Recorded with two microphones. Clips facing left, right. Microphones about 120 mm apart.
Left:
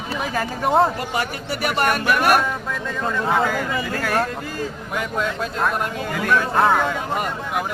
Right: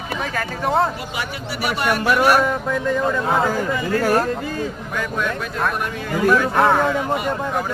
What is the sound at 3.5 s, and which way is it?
Speech, 30° right (ahead or behind).